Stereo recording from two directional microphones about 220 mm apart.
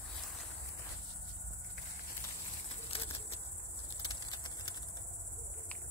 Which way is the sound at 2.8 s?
25° left (ahead or behind).